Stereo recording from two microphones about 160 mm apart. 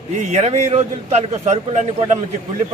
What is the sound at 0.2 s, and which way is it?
A man's voice, 45° right (ahead or behind).